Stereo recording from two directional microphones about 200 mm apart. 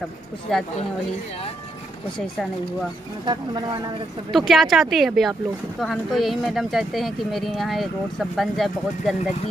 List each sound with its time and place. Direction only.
0.5 s speech: centre (ahead or behind)
2.1 s speech: 5° left (ahead or behind)
3.3 s speech: 25° right (ahead or behind)
4.3 s speech: centre (ahead or behind)